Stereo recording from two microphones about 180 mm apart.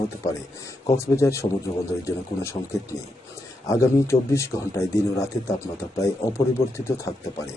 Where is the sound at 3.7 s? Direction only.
15° left (ahead or behind).